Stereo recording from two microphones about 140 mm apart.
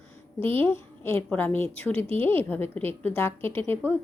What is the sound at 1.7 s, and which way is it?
Speech, 45° right (ahead or behind).